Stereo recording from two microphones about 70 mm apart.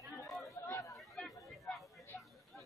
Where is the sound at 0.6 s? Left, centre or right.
Left.